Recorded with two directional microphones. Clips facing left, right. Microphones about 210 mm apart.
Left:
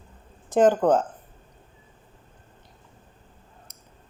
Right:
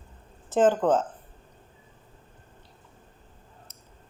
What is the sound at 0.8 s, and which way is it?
Speech, 40° left (ahead or behind).